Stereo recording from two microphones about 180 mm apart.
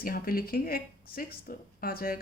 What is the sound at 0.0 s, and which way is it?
Speech, 55° left (ahead or behind).